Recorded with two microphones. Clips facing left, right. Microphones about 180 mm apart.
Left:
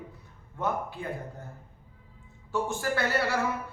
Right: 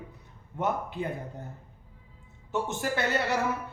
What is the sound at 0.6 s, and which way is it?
Speech, 20° right (ahead or behind).